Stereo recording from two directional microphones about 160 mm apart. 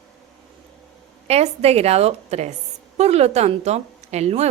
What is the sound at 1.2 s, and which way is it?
A woman's voice, 40° right (ahead or behind).